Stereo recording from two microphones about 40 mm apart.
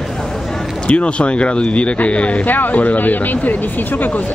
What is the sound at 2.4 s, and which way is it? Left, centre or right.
Speech, left.